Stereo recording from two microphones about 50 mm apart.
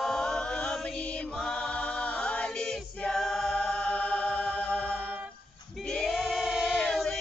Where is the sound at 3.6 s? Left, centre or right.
Left.